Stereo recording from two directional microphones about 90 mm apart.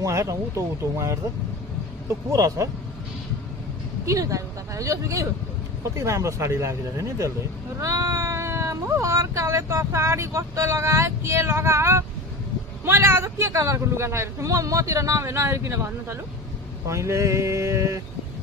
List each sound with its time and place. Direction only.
0.0 s speech: 35° right (ahead or behind)
2.3 s speech: 35° right (ahead or behind)
4.0 s speech: 40° right (ahead or behind)